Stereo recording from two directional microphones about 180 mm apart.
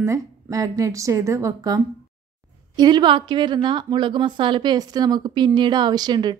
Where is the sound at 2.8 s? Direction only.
25° right (ahead or behind).